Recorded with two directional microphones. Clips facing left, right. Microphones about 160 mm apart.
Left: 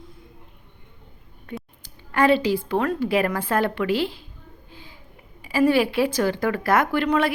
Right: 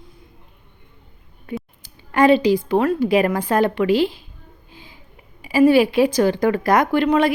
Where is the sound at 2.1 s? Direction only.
15° right (ahead or behind).